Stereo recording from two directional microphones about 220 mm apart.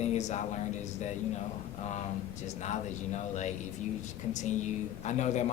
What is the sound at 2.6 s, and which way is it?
Speech, 30° left (ahead or behind).